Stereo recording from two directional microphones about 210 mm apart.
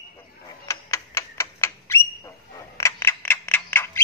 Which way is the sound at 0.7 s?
15° left (ahead or behind).